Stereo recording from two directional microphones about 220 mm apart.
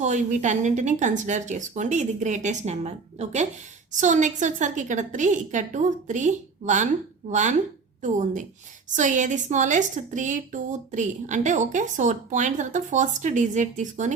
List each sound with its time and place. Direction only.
0.0 s a woman's voice: 35° right (ahead or behind)